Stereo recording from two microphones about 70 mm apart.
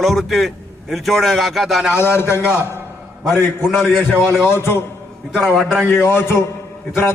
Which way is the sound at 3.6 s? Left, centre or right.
Centre.